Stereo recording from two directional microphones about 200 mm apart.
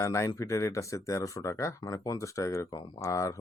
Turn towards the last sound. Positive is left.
turn(degrees=15)  # may be behind; listen again after turning